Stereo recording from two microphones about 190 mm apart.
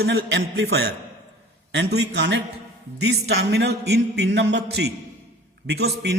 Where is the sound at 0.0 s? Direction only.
55° right (ahead or behind).